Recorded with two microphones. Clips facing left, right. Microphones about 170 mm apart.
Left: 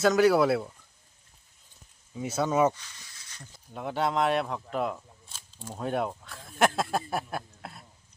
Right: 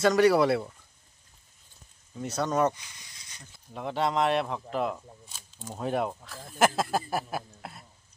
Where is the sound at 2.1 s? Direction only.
5° left (ahead or behind).